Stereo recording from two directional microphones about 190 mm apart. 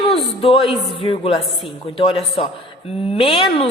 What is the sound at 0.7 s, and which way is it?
A woman's voice, 30° left (ahead or behind).